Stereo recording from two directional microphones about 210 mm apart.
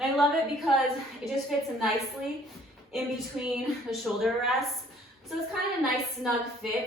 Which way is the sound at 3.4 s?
Centre (ahead or behind).